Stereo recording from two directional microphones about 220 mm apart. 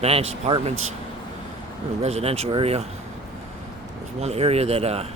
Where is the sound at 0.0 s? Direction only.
25° right (ahead or behind).